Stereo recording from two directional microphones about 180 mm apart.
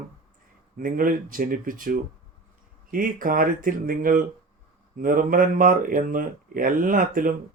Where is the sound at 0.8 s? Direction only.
50° right (ahead or behind).